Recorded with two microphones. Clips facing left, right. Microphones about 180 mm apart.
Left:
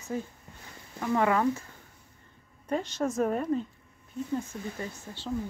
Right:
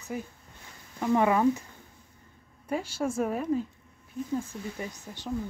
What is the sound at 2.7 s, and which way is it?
A woman's voice, 10° right (ahead or behind).